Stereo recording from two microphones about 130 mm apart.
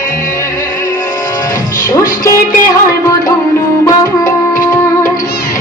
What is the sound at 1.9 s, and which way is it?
Music, 25° left (ahead or behind).